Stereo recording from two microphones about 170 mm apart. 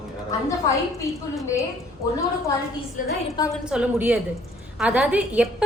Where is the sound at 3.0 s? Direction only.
50° left (ahead or behind).